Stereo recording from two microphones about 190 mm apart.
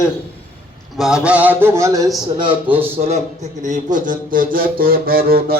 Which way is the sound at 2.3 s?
25° right (ahead or behind).